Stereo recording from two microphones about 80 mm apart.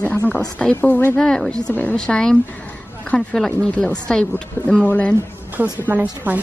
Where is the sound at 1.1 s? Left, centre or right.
Centre.